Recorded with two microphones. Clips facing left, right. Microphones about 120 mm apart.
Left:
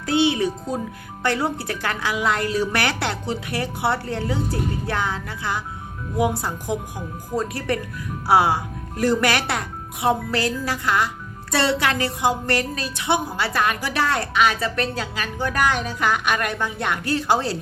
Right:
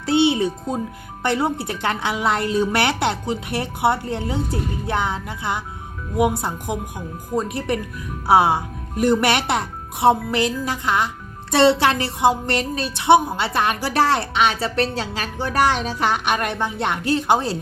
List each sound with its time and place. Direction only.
0.0 s a child's voice: 25° right (ahead or behind)
6.7 s a woman's voice: 20° right (ahead or behind); by 14.2 s 35° right (ahead or behind)
14.2 s a woman's voice: 25° right (ahead or behind)